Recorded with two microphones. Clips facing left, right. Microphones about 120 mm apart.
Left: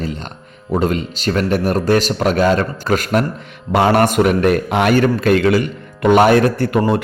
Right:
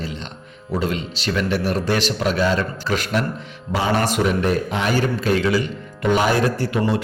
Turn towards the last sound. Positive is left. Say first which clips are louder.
# left 6 dB
turn(degrees=55)  # may be behind; listen again after turning